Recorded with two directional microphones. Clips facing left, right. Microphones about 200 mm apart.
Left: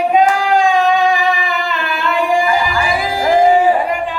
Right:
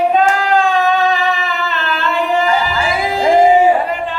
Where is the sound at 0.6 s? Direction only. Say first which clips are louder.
Left 2 dB; 15° left (ahead or behind).